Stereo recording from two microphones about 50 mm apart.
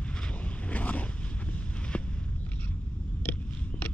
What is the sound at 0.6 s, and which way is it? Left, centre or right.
Boat, left.